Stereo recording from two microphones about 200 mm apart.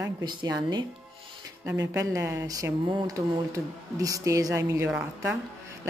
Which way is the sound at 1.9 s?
15° right (ahead or behind).